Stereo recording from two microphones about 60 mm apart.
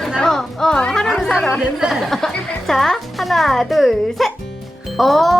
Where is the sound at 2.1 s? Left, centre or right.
Centre.